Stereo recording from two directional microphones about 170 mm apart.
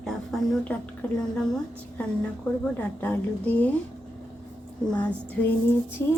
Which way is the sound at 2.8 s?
10° left (ahead or behind).